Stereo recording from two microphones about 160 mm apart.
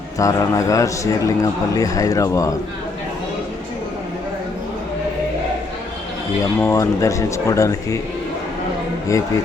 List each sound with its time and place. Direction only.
0.2 s a man's voice: 20° left (ahead or behind)
6.6 s a man's voice: 15° left (ahead or behind)
9.1 s a man's voice: 20° left (ahead or behind)